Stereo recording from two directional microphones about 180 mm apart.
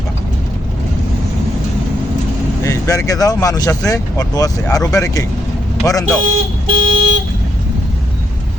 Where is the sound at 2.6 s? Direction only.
15° left (ahead or behind).